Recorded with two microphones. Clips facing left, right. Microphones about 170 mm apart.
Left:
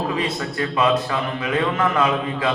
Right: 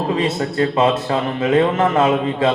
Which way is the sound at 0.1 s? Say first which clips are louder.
Right 5 dB; 25° right (ahead or behind).